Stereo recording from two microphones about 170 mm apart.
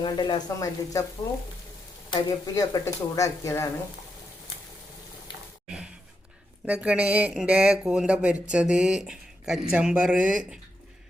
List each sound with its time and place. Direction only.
0.0 s speech: 25° left (ahead or behind)
2.0 s speech: 25° left (ahead or behind)
5.6 s sigh: 5° right (ahead or behind)
6.7 s speech: 5° right (ahead or behind)